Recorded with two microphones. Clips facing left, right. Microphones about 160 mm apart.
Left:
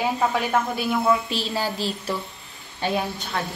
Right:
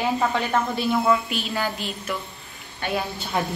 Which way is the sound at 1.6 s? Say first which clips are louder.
Left 1 dB; 30° left (ahead or behind).